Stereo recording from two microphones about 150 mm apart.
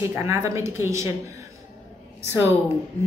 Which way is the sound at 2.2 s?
15° right (ahead or behind).